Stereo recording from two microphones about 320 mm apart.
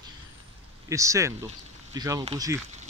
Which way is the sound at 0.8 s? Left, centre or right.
Centre.